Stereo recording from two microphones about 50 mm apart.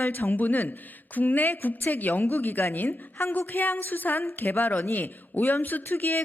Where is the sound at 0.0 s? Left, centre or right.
Left.